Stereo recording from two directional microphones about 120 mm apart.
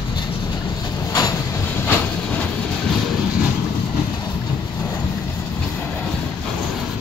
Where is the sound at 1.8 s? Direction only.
10° left (ahead or behind).